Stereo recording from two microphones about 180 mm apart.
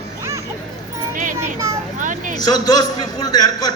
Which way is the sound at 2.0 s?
45° right (ahead or behind).